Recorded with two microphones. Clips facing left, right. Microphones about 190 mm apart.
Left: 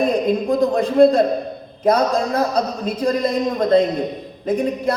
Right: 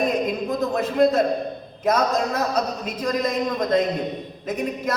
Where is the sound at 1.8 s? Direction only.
30° left (ahead or behind).